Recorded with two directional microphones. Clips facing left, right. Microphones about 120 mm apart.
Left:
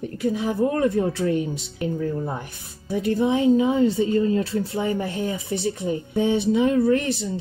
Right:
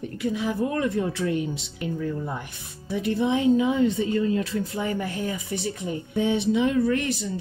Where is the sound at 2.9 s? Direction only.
40° left (ahead or behind).